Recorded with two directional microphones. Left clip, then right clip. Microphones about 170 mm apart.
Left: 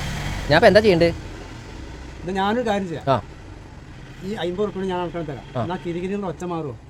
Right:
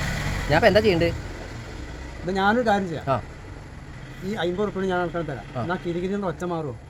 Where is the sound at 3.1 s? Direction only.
50° left (ahead or behind).